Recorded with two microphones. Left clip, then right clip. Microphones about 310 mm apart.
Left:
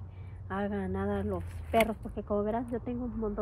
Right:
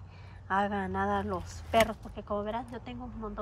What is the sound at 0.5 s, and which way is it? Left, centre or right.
A woman's voice, centre.